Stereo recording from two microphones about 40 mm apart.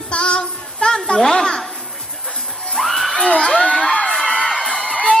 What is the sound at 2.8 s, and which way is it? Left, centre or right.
Music, centre.